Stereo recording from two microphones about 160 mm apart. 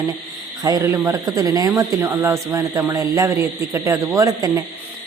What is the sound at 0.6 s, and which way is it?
Speech, 20° right (ahead or behind).